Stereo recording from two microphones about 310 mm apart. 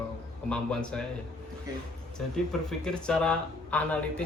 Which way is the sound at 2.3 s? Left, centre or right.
Centre.